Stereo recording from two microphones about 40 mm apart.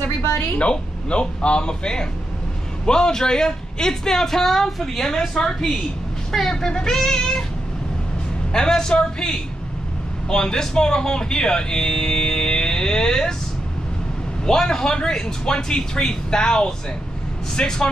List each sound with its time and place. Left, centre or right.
0.6 s speech: left
8.5 s speech: centre
14.4 s speech: centre